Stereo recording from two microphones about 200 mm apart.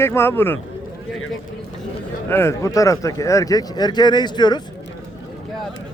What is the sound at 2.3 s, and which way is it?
Speech, 10° left (ahead or behind).